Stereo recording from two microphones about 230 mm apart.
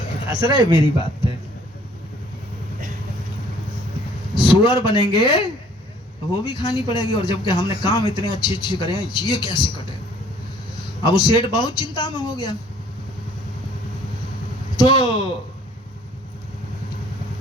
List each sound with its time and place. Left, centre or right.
0.3 s speech: centre
4.4 s speech: centre
11.0 s speech: centre
14.8 s a man's voice: centre